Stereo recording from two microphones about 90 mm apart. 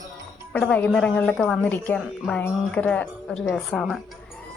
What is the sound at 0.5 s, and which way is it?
Speech, 10° left (ahead or behind).